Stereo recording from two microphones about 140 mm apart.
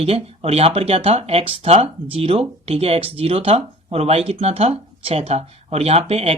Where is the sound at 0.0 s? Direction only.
45° right (ahead or behind).